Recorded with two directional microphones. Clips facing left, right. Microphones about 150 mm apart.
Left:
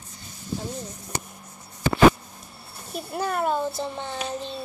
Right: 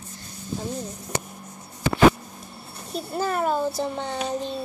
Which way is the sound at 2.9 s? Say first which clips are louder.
Right 2 dB; centre (ahead or behind).